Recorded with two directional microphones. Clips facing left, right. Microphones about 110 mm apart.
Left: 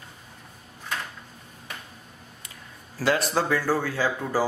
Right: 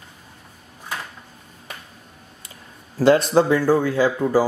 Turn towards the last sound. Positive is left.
turn(degrees=-15)  # may be behind; listen again after turning